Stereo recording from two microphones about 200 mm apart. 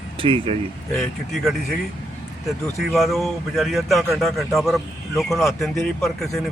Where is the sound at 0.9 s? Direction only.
Centre (ahead or behind).